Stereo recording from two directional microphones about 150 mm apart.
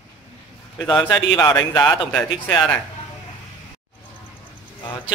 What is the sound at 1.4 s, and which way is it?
Speech, 15° left (ahead or behind).